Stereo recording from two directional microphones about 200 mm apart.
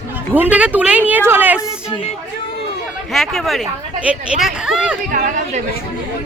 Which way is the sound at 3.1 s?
Centre (ahead or behind).